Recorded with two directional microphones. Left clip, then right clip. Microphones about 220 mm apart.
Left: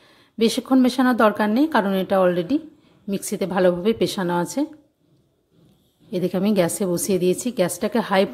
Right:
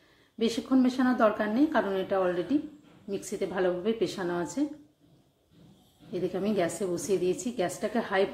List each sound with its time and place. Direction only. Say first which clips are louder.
0.4 s speech: left 8 dB; 45° left (ahead or behind)
6.1 s speech: left 8 dB; 45° left (ahead or behind)